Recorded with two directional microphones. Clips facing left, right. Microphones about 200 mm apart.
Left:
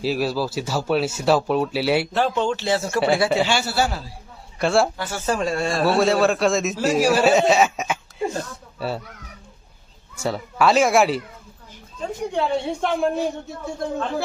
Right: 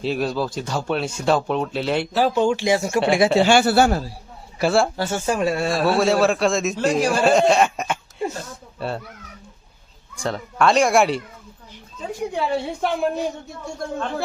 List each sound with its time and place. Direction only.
0.0 s a man's voice: 5° left (ahead or behind)
2.1 s speech: 5° right (ahead or behind)
3.4 s a man's voice: 55° right (ahead or behind)
4.5 s speech: 5° right (ahead or behind)
4.9 s speech: 25° right (ahead or behind)
5.2 s a man's voice: 10° right (ahead or behind)
10.2 s a man's voice: 5° left (ahead or behind)
12.3 s a man's voice: 5° right (ahead or behind)